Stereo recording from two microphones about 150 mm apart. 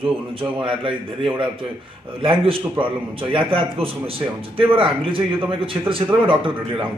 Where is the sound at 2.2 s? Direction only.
35° right (ahead or behind).